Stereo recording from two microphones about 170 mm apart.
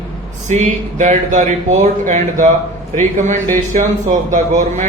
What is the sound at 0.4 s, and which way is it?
A man's voice, 45° right (ahead or behind).